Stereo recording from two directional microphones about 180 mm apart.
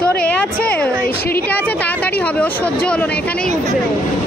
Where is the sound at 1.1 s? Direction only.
60° left (ahead or behind).